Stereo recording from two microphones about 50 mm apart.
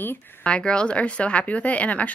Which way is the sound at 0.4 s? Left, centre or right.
Left.